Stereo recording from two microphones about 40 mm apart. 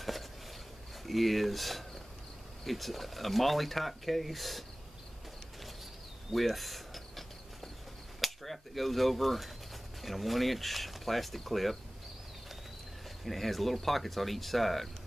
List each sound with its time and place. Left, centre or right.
1.0 s speech: centre
6.3 s a sound: centre
10.0 s speech: centre
13.2 s speech: centre